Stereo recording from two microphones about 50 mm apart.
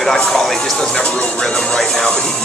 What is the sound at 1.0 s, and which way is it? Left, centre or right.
Speech, left.